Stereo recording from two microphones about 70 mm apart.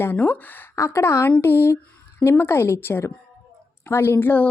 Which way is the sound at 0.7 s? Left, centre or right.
Left.